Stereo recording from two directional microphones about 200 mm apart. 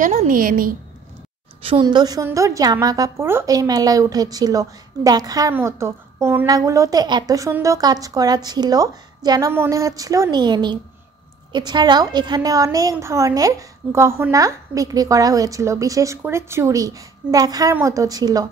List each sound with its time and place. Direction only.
0.0 s a woman's voice: 35° right (ahead or behind)
1.6 s a woman's voice: 25° right (ahead or behind)